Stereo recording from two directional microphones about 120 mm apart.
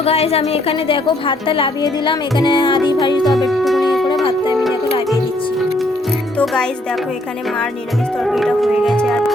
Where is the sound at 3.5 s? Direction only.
Centre (ahead or behind).